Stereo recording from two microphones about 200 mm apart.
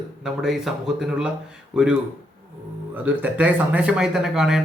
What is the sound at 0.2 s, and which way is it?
A man's voice, centre (ahead or behind).